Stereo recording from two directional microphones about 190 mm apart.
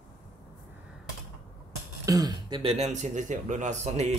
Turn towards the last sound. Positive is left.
turn(degrees=-40)  # may be behind; listen again after turning